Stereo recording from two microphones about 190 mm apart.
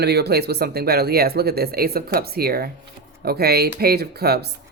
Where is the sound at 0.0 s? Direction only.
60° right (ahead or behind).